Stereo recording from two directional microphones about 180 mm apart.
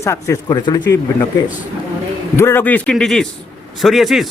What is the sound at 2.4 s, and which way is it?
A man's voice, 15° left (ahead or behind).